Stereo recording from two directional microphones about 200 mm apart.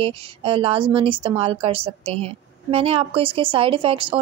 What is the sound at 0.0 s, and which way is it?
Speech, 25° right (ahead or behind).